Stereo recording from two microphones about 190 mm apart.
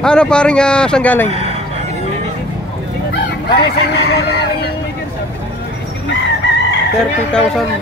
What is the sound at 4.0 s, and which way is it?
Chicken, 55° left (ahead or behind).